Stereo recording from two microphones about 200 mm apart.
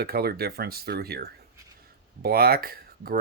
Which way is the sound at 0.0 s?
50° right (ahead or behind).